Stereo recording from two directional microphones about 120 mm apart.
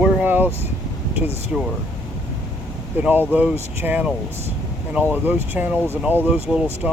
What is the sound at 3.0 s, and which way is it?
Speech, 15° right (ahead or behind).